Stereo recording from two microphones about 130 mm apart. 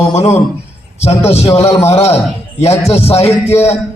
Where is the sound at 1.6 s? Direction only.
20° left (ahead or behind).